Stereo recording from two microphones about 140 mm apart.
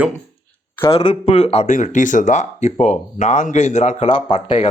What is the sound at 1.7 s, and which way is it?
Speech, 65° left (ahead or behind).